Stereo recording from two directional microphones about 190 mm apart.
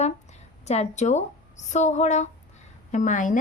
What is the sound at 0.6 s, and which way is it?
Speech, 35° left (ahead or behind).